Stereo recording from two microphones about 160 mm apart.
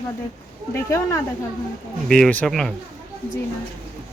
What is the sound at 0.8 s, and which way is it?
Speech, 20° left (ahead or behind).